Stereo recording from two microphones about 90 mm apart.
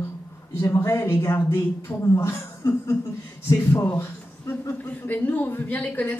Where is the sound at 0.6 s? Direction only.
35° left (ahead or behind).